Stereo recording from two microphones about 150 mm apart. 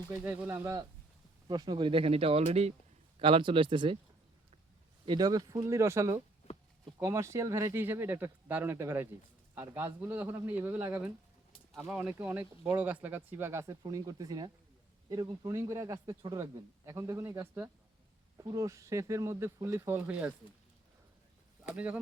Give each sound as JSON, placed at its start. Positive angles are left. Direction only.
{"t": 0.1, "sound": "speech", "side_deg": -15}
{"t": 5.0, "sound": "a man's voice", "side_deg": -25}
{"t": 6.5, "sound": "a sound", "side_deg": 45}
{"t": 7.0, "sound": "a man's voice", "side_deg": -20}